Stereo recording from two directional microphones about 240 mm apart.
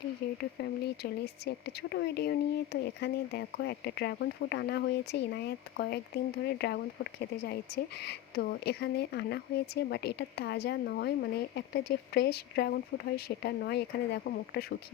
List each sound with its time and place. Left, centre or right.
0.2 s speech: left